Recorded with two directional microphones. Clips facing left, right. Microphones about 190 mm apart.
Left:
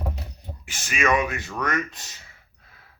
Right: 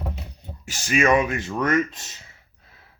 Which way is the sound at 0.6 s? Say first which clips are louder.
Right 5 dB; 35° right (ahead or behind).